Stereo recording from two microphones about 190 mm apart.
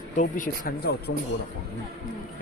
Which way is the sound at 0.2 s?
45° left (ahead or behind).